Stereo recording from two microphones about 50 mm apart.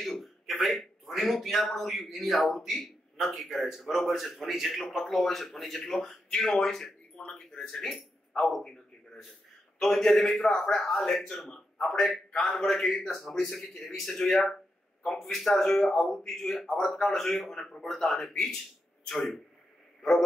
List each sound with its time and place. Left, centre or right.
0.1 s a man's voice: centre
7.2 s a sound: centre
7.6 s a man's voice: centre
9.8 s a man's voice: centre
20.0 s a man's voice: centre